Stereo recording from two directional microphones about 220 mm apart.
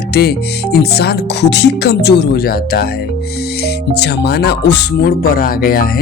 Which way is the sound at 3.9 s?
45° left (ahead or behind).